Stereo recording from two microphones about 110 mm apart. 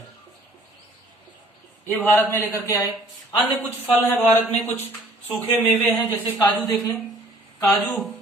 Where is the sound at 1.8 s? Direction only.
15° left (ahead or behind).